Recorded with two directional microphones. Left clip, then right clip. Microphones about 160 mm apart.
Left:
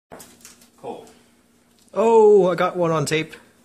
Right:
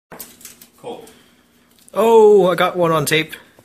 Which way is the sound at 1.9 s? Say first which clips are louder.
Right 3 dB; 10° left (ahead or behind).